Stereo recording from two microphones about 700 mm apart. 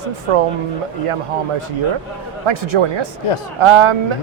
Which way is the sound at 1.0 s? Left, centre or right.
Right.